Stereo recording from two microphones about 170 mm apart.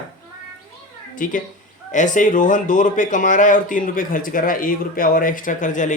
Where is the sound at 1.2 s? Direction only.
50° left (ahead or behind).